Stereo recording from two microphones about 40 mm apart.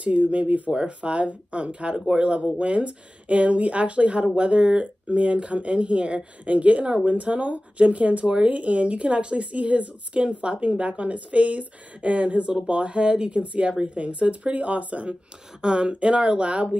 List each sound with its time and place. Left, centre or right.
0.0 s speech: right
15.6 s speech: right